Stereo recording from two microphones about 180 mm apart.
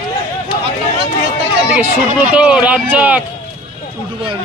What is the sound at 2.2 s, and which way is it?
Speech, 5° right (ahead or behind).